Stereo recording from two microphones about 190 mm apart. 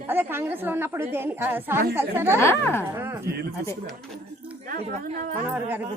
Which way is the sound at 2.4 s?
10° left (ahead or behind).